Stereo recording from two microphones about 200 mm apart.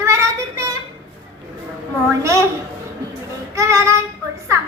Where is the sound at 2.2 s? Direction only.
15° right (ahead or behind).